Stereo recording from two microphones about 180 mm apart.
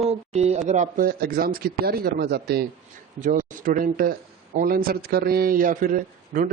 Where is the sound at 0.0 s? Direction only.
35° right (ahead or behind).